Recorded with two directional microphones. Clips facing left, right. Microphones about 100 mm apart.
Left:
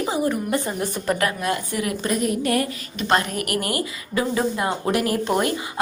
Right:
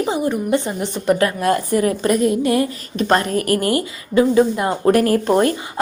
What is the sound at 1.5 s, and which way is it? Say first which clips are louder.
Speech: right 8 dB; 40° right (ahead or behind).